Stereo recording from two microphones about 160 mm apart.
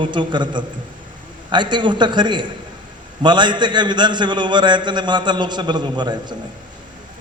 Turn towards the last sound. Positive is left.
turn(degrees=-30)  # may be behind; listen again after turning